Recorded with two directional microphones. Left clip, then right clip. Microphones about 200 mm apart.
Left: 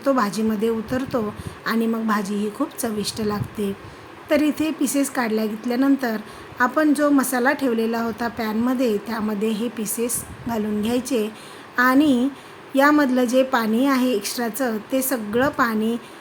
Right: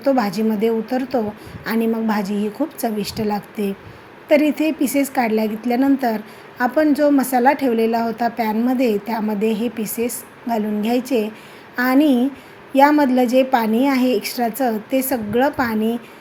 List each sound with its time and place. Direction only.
0.0 s a woman's voice: 5° right (ahead or behind)